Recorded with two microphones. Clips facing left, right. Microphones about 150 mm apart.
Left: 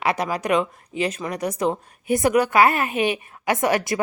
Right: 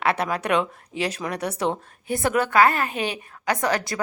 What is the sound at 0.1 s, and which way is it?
Speech, 5° left (ahead or behind).